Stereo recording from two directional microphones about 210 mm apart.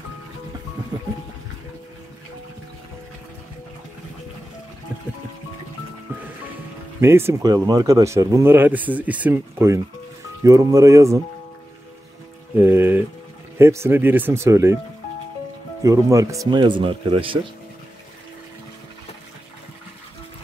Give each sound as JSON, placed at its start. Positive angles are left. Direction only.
{"t": 7.0, "sound": "speech", "side_deg": -10}
{"t": 12.5, "sound": "speech", "side_deg": -10}
{"t": 15.8, "sound": "speech", "side_deg": -15}